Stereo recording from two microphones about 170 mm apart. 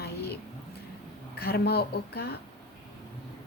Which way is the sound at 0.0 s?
70° left (ahead or behind).